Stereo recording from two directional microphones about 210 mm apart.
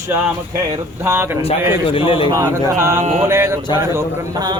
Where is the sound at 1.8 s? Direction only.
25° left (ahead or behind).